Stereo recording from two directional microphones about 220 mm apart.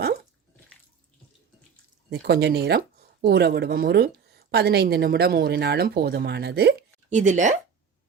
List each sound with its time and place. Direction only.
2.0 s speech: 50° right (ahead or behind)
7.1 s speech: 35° right (ahead or behind)